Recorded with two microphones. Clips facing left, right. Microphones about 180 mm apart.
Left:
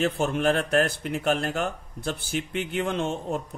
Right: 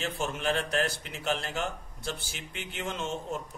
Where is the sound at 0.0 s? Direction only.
55° left (ahead or behind).